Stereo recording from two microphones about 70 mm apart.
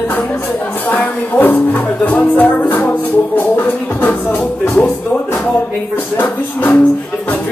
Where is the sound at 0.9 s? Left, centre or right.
Left.